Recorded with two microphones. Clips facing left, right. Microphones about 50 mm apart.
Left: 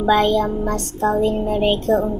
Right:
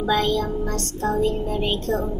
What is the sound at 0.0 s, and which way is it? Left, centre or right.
Speech, left.